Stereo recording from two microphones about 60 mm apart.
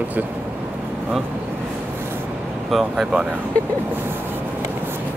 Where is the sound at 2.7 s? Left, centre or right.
Centre.